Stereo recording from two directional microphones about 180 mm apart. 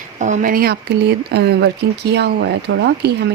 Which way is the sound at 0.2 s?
45° right (ahead or behind).